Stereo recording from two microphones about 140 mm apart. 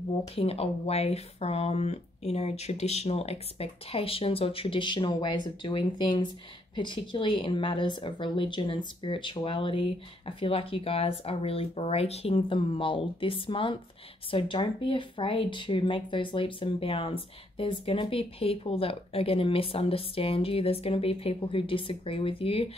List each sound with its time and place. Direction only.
0.4 s speech: 45° left (ahead or behind)